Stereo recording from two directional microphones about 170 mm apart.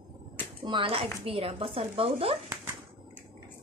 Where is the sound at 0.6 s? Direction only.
30° right (ahead or behind).